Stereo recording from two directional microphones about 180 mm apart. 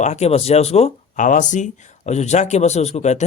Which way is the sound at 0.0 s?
40° left (ahead or behind).